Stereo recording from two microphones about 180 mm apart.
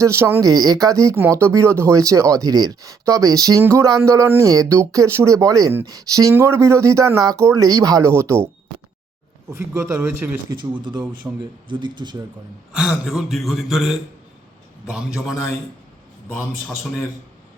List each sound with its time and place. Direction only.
0.0 s speech: 15° right (ahead or behind)
9.5 s speech: 15° right (ahead or behind)
10.5 s speech: 25° right (ahead or behind)
12.7 s a man's voice: 5° right (ahead or behind)